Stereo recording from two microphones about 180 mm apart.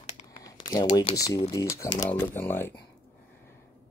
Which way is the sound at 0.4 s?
25° left (ahead or behind).